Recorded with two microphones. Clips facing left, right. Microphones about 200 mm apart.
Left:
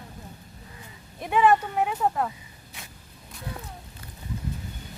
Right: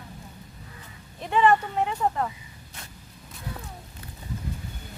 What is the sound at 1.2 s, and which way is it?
Speech, 10° left (ahead or behind).